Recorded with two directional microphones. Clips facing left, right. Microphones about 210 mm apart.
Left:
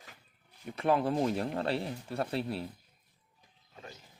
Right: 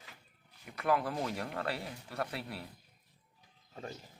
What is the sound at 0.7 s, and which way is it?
Speech, 25° left (ahead or behind).